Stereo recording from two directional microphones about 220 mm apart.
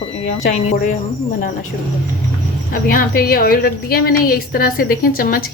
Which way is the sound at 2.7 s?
40° left (ahead or behind).